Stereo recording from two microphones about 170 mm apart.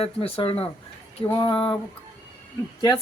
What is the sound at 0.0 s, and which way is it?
Speech, 35° left (ahead or behind).